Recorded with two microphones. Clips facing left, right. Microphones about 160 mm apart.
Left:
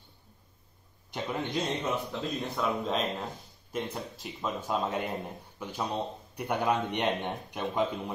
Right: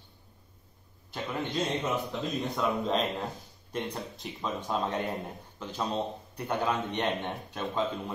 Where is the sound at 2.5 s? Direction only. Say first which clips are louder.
Right 2 dB; centre (ahead or behind).